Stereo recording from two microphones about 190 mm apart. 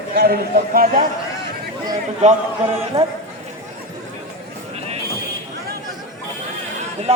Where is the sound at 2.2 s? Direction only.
30° right (ahead or behind).